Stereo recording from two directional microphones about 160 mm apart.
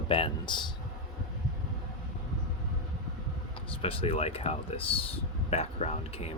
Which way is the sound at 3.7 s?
35° left (ahead or behind).